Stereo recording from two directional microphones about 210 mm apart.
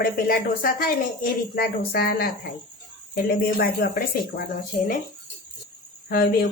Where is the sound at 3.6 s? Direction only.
45° left (ahead or behind).